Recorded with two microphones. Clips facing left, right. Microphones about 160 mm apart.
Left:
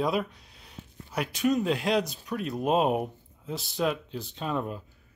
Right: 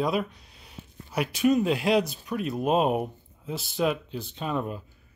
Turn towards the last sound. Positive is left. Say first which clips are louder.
# right 1 dB
turn(degrees=-5)  # may be behind; listen again after turning